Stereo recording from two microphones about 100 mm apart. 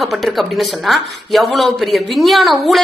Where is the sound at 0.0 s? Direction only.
Centre (ahead or behind).